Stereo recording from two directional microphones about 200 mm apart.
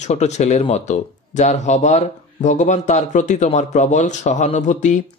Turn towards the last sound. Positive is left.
turn(degrees=35)  # may be behind; listen again after turning